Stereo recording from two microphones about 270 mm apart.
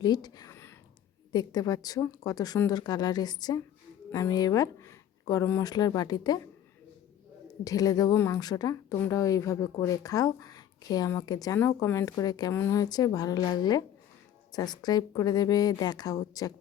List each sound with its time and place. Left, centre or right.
0.0 s a sound: centre
1.3 s speech: centre
7.6 s speech: centre